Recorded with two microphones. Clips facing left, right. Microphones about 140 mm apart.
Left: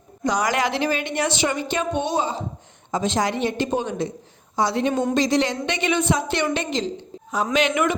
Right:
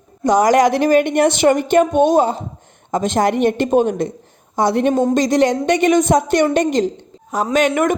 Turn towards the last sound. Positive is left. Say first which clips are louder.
# right 5 dB
turn(degrees=-45)  # may be behind; listen again after turning